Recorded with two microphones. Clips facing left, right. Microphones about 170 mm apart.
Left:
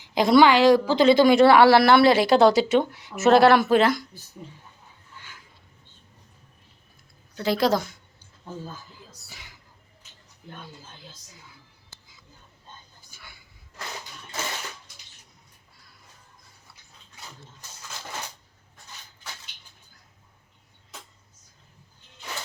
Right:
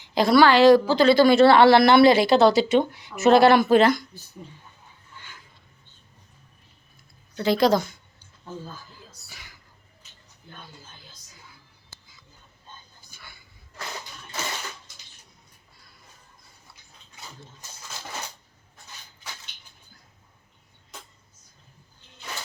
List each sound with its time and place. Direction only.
0.0 s a woman's voice: 15° left (ahead or behind)
7.3 s speech: centre (ahead or behind)
9.3 s a sound: 20° left (ahead or behind)